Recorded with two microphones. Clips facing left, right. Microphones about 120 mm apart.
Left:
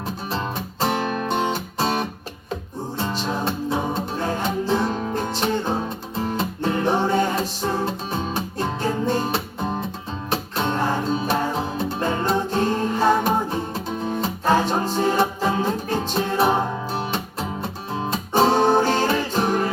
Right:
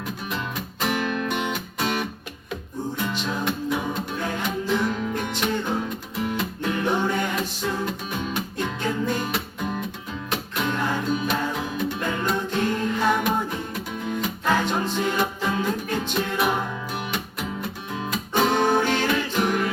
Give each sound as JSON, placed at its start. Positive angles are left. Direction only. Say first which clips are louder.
{"t": 0.3, "sound": "music", "louder": "left 5 dB", "side_deg": 30}